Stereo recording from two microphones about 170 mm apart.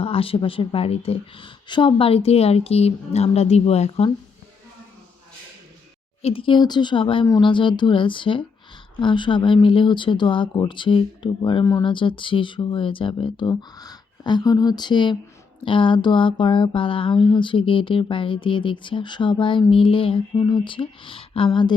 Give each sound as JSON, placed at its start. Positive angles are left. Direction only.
{"t": 0.0, "sound": "speech", "side_deg": 35}
{"t": 6.2, "sound": "speech", "side_deg": 30}